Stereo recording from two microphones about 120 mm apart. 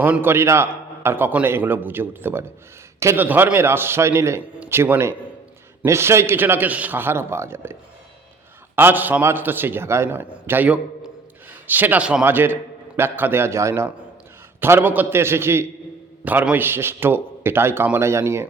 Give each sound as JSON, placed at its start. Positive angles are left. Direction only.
{"t": 0.0, "sound": "a man's voice", "side_deg": -15}